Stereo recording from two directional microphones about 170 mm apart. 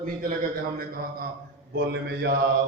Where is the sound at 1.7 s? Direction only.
75° right (ahead or behind).